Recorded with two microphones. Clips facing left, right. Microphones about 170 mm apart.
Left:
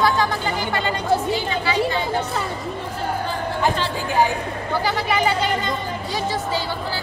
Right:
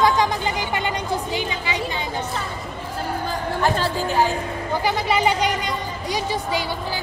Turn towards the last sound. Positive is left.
turn(degrees=-15)  # may be behind; listen again after turning